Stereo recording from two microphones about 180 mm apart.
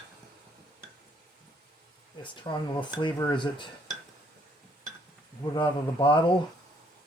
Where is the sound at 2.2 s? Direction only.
25° left (ahead or behind).